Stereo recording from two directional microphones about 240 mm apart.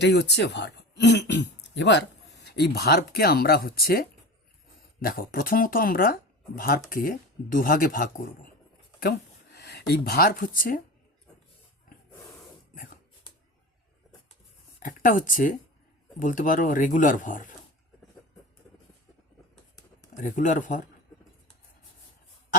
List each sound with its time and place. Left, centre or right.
0.0 s speech: left
14.8 s speech: left
20.1 s speech: left